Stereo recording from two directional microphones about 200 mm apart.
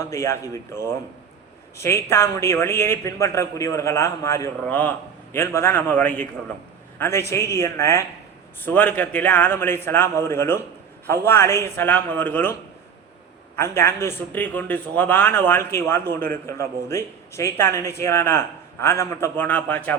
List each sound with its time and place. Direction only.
0.0 s a man's voice: 15° left (ahead or behind)
1.8 s a man's voice: 15° left (ahead or behind)
13.6 s a man's voice: 10° left (ahead or behind)